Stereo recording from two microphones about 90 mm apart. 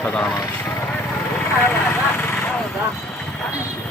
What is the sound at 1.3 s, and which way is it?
Vehicle, 20° left (ahead or behind).